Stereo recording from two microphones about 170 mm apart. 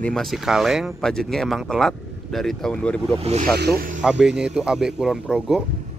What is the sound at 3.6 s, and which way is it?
Speech, 60° right (ahead or behind).